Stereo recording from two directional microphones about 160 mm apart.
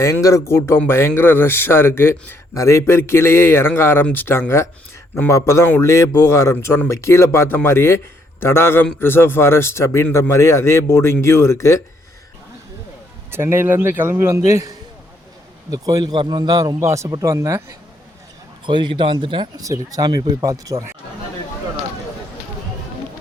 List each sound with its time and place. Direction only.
0.0 s a man's voice: 20° left (ahead or behind)
13.3 s a man's voice: 15° right (ahead or behind)
15.7 s speech: 20° right (ahead or behind)
18.6 s speech: 30° right (ahead or behind)